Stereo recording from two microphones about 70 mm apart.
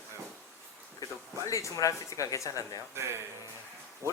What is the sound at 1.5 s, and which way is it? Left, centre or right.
Speech, left.